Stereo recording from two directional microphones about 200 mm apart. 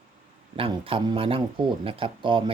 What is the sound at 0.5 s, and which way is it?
Speech, 25° right (ahead or behind).